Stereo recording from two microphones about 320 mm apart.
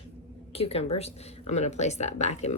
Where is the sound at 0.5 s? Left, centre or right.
Centre.